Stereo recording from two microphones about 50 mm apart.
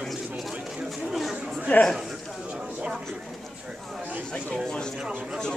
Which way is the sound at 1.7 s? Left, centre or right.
Left.